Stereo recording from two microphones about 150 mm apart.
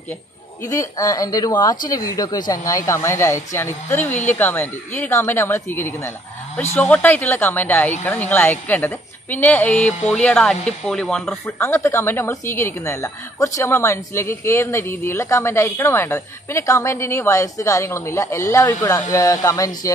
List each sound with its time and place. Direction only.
0.7 s a woman's voice: 20° left (ahead or behind); by 11.3 s 5° left (ahead or behind)
11.4 s a woman's voice: 15° left (ahead or behind)